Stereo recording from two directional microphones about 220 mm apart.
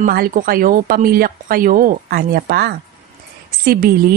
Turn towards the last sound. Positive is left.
turn(degrees=-40)  # may be behind; listen again after turning